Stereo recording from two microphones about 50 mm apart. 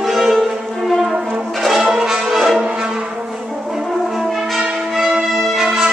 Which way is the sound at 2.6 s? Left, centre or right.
Right.